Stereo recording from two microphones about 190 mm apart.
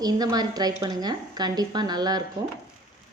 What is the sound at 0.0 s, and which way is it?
Speech, 20° right (ahead or behind).